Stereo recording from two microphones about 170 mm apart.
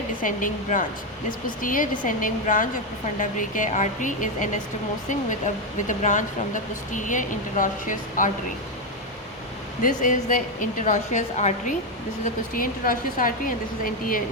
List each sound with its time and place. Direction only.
0.2 s speech: 50° left (ahead or behind)
5.9 s speech: 45° left (ahead or behind)
9.8 s speech: 50° left (ahead or behind)
12.2 s a woman's voice: 55° left (ahead or behind)